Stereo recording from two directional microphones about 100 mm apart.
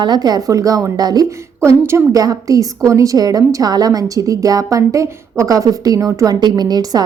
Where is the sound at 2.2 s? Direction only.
35° right (ahead or behind).